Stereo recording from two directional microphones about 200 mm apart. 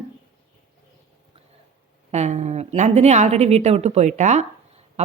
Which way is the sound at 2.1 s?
35° right (ahead or behind).